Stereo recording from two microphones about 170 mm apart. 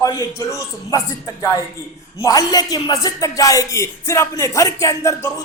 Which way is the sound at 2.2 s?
20° left (ahead or behind).